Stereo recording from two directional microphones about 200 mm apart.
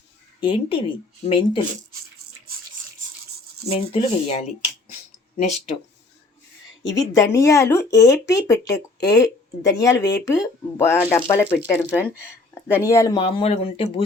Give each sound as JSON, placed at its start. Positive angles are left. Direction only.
{"t": 0.3, "sound": "speech", "side_deg": 25}
{"t": 3.7, "sound": "speech", "side_deg": 30}
{"t": 7.1, "sound": "speech", "side_deg": 15}